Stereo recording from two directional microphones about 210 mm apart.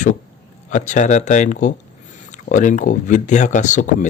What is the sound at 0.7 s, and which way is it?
Speech, 35° left (ahead or behind).